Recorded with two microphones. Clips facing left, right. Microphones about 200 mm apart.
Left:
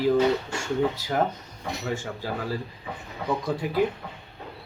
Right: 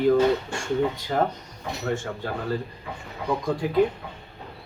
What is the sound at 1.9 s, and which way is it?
Speech, 5° left (ahead or behind).